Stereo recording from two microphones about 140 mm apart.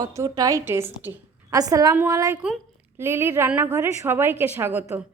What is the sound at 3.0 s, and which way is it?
A woman's voice, 15° right (ahead or behind).